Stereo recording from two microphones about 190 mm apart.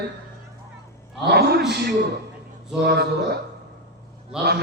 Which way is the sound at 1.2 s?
60° right (ahead or behind).